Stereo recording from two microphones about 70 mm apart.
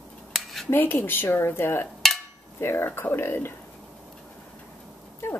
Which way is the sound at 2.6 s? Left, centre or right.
Left.